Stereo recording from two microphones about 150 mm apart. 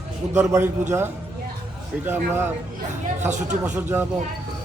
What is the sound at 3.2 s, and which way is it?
Speech, 50° right (ahead or behind).